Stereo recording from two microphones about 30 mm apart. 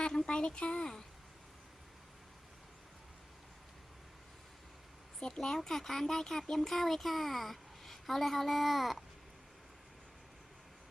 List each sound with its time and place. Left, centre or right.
0.3 s speech: left
5.2 s speech: left
5.5 s speech: centre
6.4 s a woman's voice: centre